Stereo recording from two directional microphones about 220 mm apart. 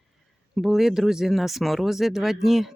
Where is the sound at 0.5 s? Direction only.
Centre (ahead or behind).